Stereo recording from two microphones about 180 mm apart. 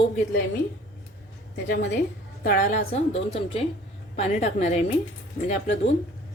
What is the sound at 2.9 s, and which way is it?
A woman's voice, 35° left (ahead or behind).